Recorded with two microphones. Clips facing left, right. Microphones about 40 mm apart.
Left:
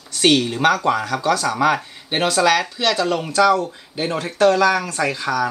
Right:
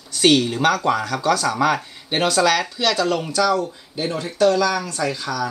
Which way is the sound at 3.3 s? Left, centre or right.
Left.